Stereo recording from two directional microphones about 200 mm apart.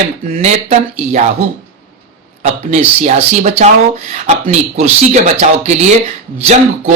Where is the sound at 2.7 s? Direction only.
35° right (ahead or behind).